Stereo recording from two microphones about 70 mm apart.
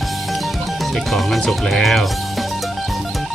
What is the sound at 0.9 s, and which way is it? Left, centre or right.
Speech, centre.